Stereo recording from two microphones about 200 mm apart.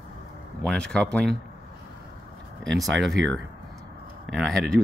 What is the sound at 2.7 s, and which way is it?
Speech, centre (ahead or behind).